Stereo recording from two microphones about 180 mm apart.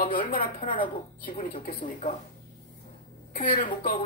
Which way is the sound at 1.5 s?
30° left (ahead or behind).